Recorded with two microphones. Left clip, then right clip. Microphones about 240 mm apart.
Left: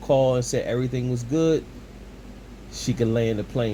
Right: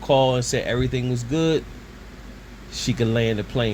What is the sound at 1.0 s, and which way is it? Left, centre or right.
Speech, right.